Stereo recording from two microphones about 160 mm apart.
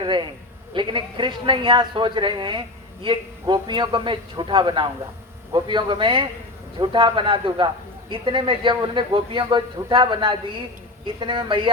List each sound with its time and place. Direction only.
0.0 s a man's voice: 30° right (ahead or behind)